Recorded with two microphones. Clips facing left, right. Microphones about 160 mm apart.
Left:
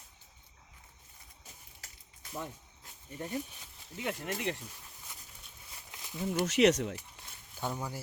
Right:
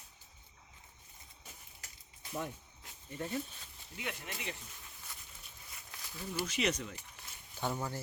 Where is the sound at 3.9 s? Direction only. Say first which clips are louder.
Left 7 dB; 45° left (ahead or behind).